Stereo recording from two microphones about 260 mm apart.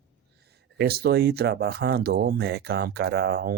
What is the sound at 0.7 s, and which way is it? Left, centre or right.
Speech, right.